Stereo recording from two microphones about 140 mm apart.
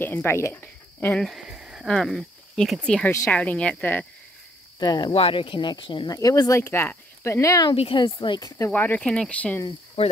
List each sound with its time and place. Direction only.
0.0 s speech: 15° left (ahead or behind)
1.2 s a sound: 5° right (ahead or behind)
1.9 s speech: 5° left (ahead or behind)
3.1 s speech: 20° left (ahead or behind)
3.3 s speech: 10° left (ahead or behind)
4.7 s speech: 30° left (ahead or behind)
5.1 s speech: 40° left (ahead or behind); by 7.7 s 20° left (ahead or behind)
7.7 s speech: 40° left (ahead or behind)
8.5 s speech: 20° left (ahead or behind)
10.0 s speech: 45° left (ahead or behind)